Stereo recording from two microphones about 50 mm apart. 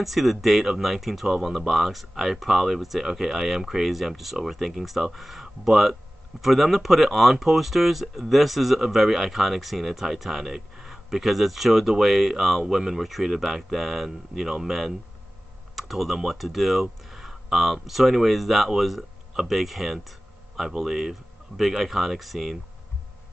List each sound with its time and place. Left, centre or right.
0.0 s speech: centre